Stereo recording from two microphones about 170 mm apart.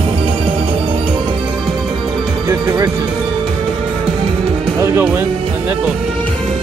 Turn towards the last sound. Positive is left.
turn(degrees=-15)  # may be behind; listen again after turning